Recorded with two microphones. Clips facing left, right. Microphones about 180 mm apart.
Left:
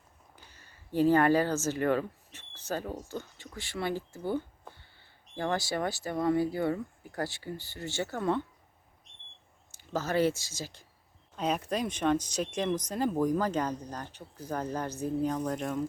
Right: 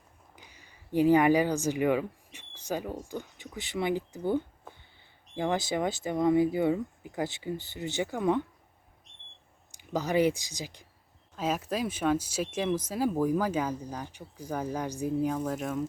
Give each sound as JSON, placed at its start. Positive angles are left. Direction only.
{"t": 0.3, "sound": "speech", "side_deg": -15}
{"t": 9.0, "sound": "a sound", "side_deg": 0}
{"t": 9.7, "sound": "speech", "side_deg": -15}
{"t": 11.3, "sound": "speech", "side_deg": 0}